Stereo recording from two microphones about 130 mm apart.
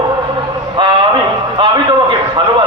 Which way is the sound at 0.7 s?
35° right (ahead or behind).